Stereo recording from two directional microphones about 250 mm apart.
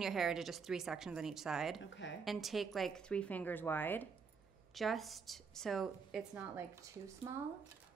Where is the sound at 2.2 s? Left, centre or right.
Centre.